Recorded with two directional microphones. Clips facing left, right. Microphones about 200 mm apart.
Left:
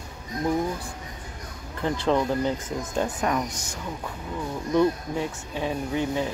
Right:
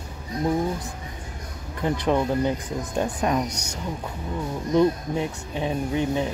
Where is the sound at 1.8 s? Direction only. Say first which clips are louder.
Right 1 dB; 15° right (ahead or behind).